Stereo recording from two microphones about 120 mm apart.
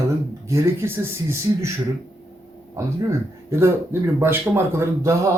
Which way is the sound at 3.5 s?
25° right (ahead or behind).